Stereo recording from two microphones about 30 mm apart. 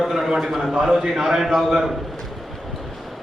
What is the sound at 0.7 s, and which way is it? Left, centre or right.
Speech, right.